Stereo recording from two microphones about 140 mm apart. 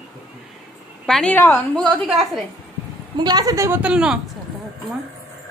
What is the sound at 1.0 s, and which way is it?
A woman's voice, 5° left (ahead or behind).